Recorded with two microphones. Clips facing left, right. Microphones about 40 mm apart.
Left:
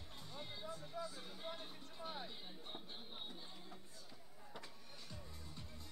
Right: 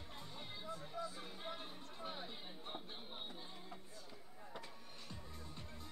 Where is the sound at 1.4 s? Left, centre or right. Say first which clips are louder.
Even; centre.